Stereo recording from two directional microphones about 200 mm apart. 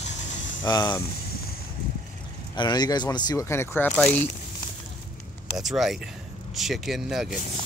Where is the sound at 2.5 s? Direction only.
20° left (ahead or behind).